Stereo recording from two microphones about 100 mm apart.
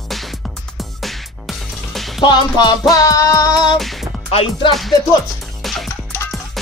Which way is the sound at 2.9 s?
35° left (ahead or behind).